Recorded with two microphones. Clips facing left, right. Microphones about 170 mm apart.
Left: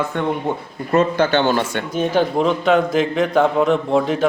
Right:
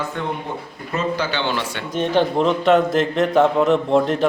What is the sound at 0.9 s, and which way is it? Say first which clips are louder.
Speech: left 7 dB; 55° left (ahead or behind).